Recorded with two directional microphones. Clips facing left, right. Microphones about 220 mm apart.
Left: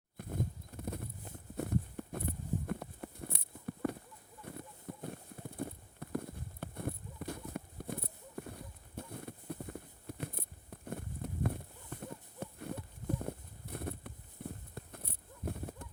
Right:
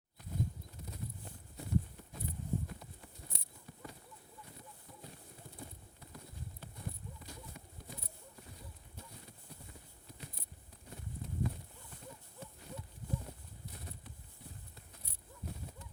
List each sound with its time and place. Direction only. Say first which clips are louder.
0.2 s horse: left 2 dB; 55° left (ahead or behind)
1.5 s a sound: left 2 dB; 55° left (ahead or behind)
4.5 s horse: left 13 dB; 55° left (ahead or behind)
4.9 s clip-clop: left 13 dB; 60° left (ahead or behind)
5.5 s horse: left 13 dB; 60° left (ahead or behind)
13.1 s a sound: left 6 dB; 55° left (ahead or behind)
14.8 s horse: left 10 dB; 55° left (ahead or behind)